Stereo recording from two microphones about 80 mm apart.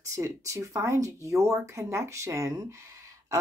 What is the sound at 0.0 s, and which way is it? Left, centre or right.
A woman's voice, right.